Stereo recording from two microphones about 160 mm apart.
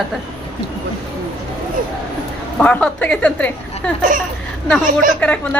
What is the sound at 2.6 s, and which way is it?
A woman's voice, 5° left (ahead or behind).